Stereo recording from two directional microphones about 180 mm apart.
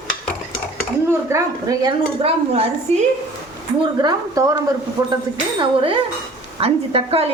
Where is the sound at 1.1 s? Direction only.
20° right (ahead or behind).